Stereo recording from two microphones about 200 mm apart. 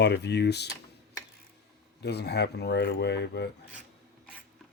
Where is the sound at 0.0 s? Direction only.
55° left (ahead or behind).